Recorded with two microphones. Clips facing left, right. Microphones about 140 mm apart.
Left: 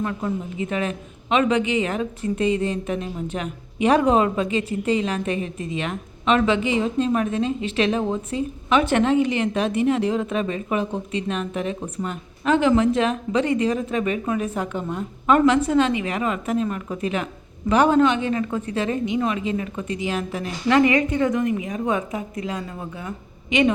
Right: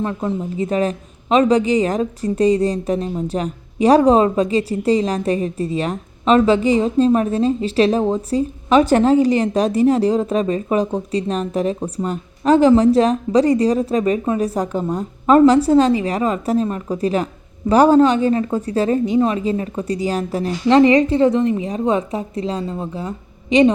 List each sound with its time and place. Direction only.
0.0 s a woman's voice: 30° right (ahead or behind)